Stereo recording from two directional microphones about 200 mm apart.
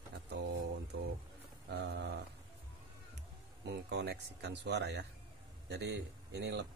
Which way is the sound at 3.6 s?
55° right (ahead or behind).